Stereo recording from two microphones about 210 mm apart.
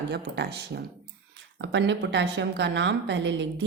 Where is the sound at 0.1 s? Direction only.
55° right (ahead or behind).